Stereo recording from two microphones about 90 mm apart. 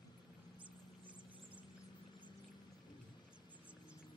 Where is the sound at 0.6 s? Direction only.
15° right (ahead or behind).